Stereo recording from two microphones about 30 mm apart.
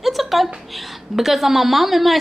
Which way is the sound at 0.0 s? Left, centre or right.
Centre.